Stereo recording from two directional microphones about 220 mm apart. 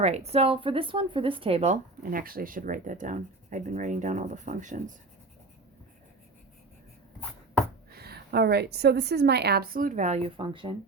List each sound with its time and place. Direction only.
0.0 s speech: 30° right (ahead or behind)
7.9 s a woman's voice: 45° right (ahead or behind); by 10.8 s 25° right (ahead or behind)